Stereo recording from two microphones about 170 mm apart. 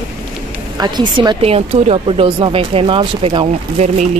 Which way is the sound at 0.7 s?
25° right (ahead or behind).